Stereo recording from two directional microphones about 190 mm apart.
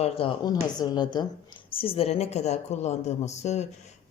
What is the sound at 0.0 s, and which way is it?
Speech, 30° left (ahead or behind).